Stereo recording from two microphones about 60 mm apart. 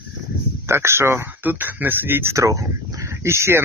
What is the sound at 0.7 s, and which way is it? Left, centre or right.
Speech, right.